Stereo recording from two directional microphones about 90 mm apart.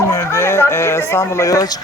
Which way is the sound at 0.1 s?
30° left (ahead or behind).